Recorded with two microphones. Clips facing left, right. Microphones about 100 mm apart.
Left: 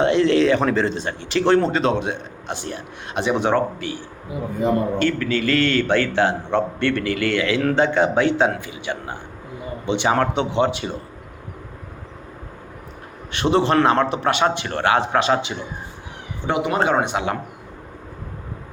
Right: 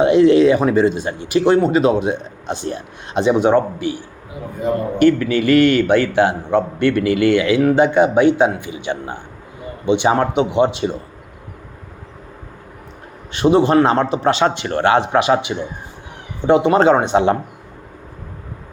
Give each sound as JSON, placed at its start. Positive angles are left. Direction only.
{"t": 0.0, "sound": "a man's voice", "side_deg": -20}
{"t": 13.4, "sound": "speech", "side_deg": -20}
{"t": 16.5, "sound": "speech", "side_deg": -30}